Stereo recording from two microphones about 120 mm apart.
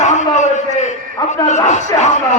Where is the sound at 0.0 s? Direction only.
80° left.